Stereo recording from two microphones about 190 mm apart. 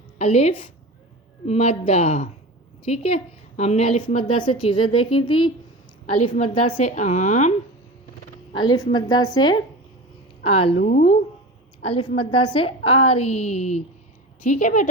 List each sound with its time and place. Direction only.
0.2 s a woman's voice: 35° left (ahead or behind)
8.5 s a woman's voice: 20° left (ahead or behind)
11.8 s a woman's voice: 30° left (ahead or behind)